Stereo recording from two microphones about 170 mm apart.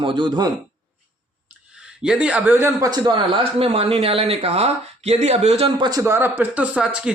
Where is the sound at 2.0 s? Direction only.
5° right (ahead or behind).